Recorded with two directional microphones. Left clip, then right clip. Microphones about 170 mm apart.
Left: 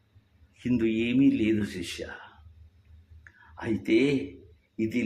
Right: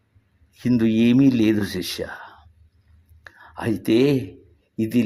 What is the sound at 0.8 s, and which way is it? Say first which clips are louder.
Speech: right 6 dB; 35° right (ahead or behind).